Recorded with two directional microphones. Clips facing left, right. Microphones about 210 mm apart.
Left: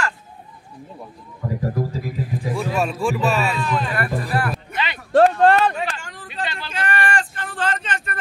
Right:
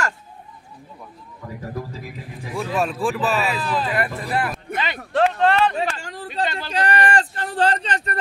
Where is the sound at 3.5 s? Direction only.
35° right (ahead or behind).